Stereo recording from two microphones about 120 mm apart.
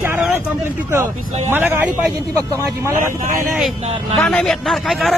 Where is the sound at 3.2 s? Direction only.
25° right (ahead or behind).